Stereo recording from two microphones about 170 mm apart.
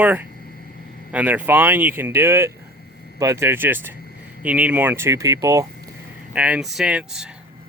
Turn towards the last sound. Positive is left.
turn(degrees=-5)  # may be behind; listen again after turning